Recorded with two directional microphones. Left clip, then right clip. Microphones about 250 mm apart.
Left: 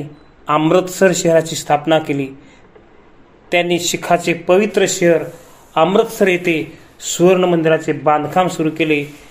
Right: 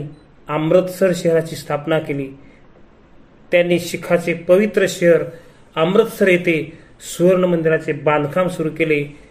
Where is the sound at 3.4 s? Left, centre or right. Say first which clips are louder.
Even; centre.